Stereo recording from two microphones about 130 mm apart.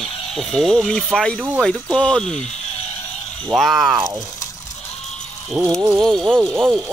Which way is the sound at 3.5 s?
Centre (ahead or behind).